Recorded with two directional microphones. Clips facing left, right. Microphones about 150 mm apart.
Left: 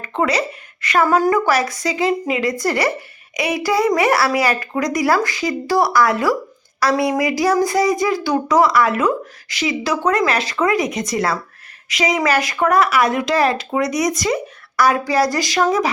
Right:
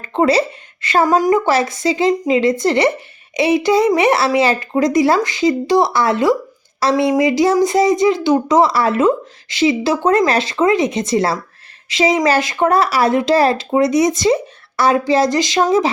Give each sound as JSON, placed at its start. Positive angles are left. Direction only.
{"t": 0.0, "sound": "a woman's voice", "side_deg": -30}